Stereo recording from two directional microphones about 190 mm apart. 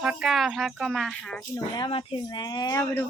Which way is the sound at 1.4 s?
20° left (ahead or behind).